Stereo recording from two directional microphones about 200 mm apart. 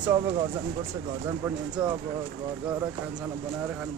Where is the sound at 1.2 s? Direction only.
10° right (ahead or behind).